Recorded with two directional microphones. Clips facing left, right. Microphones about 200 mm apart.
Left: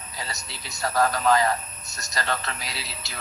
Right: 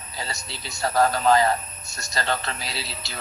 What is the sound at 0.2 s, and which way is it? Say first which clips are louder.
A man's voice: right 3 dB; 30° right (ahead or behind).